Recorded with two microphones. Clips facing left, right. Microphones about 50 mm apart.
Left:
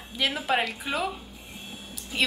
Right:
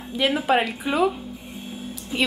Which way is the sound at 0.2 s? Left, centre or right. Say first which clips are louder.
Right 5 dB; centre.